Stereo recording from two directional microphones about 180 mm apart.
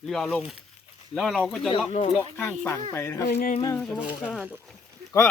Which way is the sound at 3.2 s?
45° left (ahead or behind).